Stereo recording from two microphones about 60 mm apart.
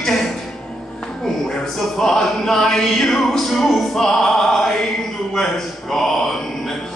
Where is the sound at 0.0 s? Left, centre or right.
Centre.